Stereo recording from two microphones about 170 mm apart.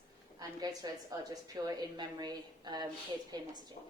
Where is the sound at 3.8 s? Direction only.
40° left (ahead or behind).